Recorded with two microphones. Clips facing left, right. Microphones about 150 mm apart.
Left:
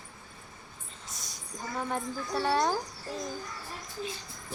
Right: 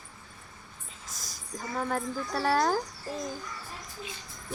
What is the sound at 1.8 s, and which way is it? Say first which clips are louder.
Speech: right 2 dB; centre (ahead or behind).